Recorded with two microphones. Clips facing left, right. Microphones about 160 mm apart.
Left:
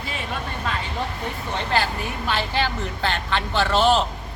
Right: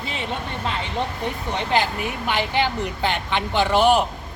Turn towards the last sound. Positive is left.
turn(degrees=-15)  # may be behind; listen again after turning